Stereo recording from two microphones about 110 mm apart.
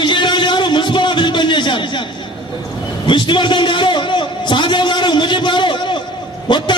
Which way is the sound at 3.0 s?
45° left (ahead or behind).